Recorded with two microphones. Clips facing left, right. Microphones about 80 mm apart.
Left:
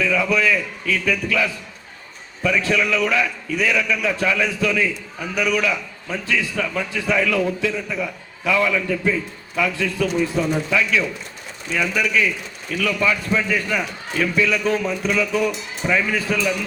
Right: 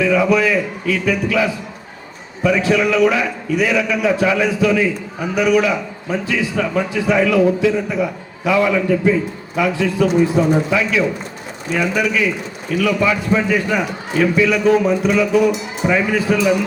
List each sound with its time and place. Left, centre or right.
0.0 s a man's voice: right
8.5 s a man's voice: right